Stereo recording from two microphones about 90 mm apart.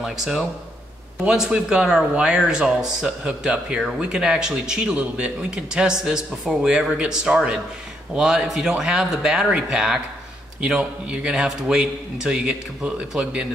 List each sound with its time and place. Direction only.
0.0 s speech: 5° right (ahead or behind)